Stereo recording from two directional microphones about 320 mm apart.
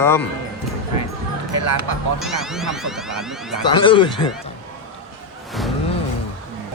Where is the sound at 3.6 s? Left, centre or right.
Centre.